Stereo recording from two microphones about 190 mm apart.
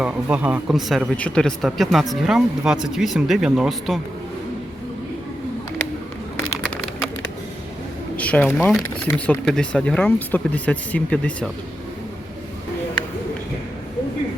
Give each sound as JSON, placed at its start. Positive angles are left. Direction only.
{"t": 0.0, "sound": "speech", "side_deg": -5}
{"t": 8.1, "sound": "speech", "side_deg": 5}